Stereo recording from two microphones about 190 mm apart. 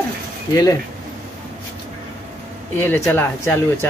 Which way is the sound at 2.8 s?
10° left (ahead or behind).